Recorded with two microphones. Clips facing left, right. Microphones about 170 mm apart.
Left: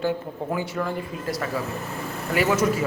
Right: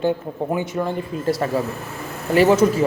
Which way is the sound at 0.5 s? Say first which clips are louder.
Right 3 dB; 20° right (ahead or behind).